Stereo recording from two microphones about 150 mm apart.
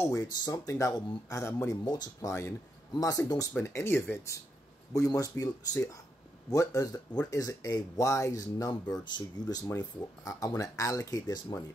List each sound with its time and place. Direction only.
0.0 s speech: 20° left (ahead or behind)